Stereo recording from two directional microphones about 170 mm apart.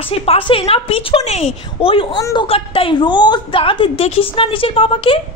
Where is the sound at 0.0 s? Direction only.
35° left (ahead or behind).